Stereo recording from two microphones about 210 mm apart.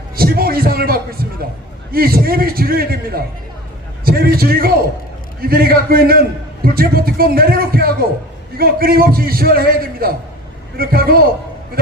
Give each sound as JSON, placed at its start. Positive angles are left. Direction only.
{"t": 0.2, "sound": "a man's voice", "side_deg": -45}